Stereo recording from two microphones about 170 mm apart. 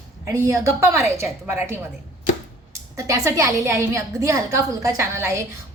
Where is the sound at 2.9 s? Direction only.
20° right (ahead or behind).